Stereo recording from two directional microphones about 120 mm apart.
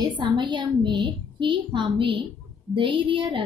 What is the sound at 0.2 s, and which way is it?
A woman's voice, 40° right (ahead or behind).